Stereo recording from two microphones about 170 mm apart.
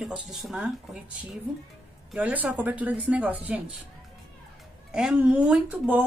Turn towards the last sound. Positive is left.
turn(degrees=-10)  # may be behind; listen again after turning